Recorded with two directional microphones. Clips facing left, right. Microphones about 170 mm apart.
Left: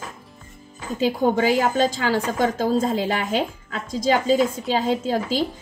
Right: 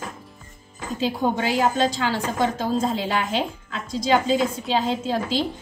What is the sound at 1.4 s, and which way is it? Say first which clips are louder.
A woman's voice: left 1 dB; 45° left (ahead or behind).